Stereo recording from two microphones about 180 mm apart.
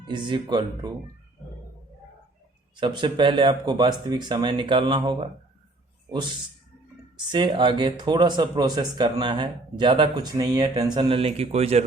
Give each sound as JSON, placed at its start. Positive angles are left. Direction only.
{"t": 0.0, "sound": "speech", "side_deg": -25}
{"t": 2.7, "sound": "speech", "side_deg": -25}